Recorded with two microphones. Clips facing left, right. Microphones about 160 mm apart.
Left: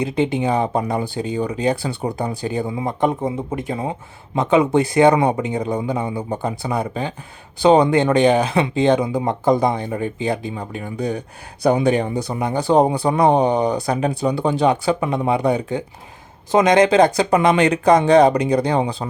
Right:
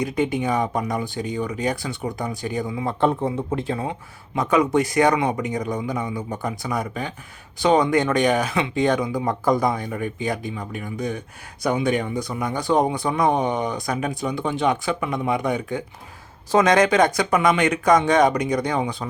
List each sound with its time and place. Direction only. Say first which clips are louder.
0.0 s speech: left 3 dB; 25° left (ahead or behind)
2.8 s speech: even; 15° left (ahead or behind)
4.4 s speech: left 3 dB; 25° left (ahead or behind)
16.5 s speech: left 3 dB; 20° left (ahead or behind)